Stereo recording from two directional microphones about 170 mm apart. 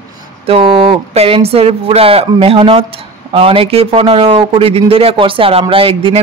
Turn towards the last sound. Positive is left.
turn(degrees=-30)  # may be behind; listen again after turning